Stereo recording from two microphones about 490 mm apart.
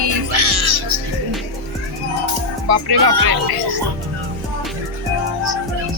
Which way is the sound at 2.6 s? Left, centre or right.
Right.